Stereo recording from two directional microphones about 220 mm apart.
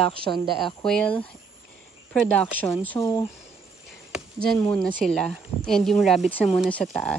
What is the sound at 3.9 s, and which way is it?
Chop, centre (ahead or behind).